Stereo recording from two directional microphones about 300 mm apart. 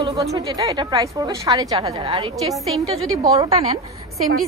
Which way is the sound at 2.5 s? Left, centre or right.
Centre.